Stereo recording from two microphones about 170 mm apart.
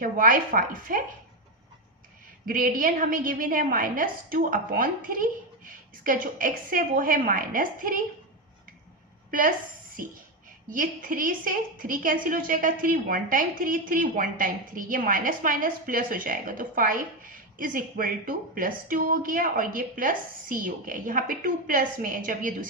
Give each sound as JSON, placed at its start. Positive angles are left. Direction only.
{"t": 0.0, "sound": "a woman's voice", "side_deg": -55}
{"t": 2.5, "sound": "a woman's voice", "side_deg": -55}
{"t": 10.7, "sound": "a woman's voice", "side_deg": -55}